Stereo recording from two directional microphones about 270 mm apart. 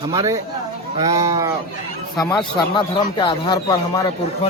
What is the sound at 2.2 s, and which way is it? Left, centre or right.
Speech, centre.